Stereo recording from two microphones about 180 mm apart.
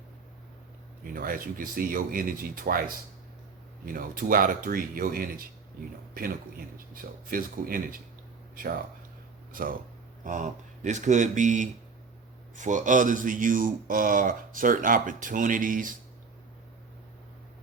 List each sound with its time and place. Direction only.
1.0 s speech: 50° right (ahead or behind)
6.7 s speech: 50° right (ahead or behind)
9.5 s speech: 50° right (ahead or behind)